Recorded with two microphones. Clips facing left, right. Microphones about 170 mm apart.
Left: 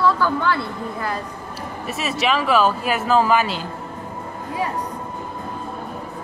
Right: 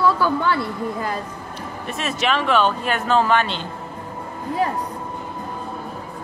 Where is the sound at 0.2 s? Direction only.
15° right (ahead or behind).